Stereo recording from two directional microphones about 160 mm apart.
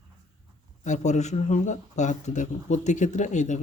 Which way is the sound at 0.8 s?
50° left (ahead or behind).